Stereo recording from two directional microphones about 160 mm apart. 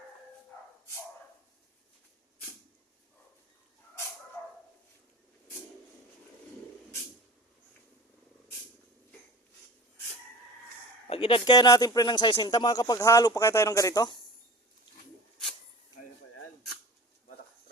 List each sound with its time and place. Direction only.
11.1 s speech: 35° left (ahead or behind)